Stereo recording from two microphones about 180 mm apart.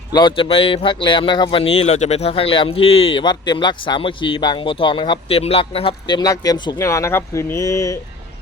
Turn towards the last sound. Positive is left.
turn(degrees=15)  # may be behind; listen again after turning